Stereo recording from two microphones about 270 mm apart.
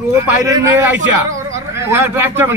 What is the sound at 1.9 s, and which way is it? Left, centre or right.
Speech, centre.